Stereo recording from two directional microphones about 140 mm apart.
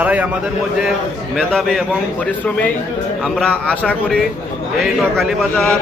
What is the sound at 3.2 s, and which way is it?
A man's voice, 5° left (ahead or behind).